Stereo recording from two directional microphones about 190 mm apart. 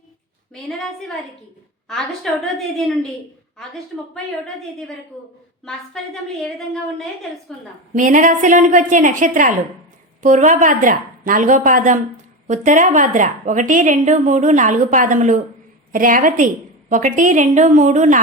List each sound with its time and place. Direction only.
0.5 s a woman's voice: centre (ahead or behind)
2.4 s a woman's voice: centre (ahead or behind)
6.0 s a woman's voice: 5° left (ahead or behind)
7.9 s a woman's voice: 45° right (ahead or behind)